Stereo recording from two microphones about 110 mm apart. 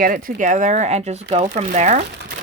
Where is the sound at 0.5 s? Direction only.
90° right.